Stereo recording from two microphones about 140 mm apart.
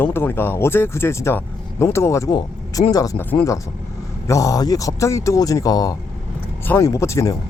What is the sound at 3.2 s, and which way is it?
Speech, 15° left (ahead or behind).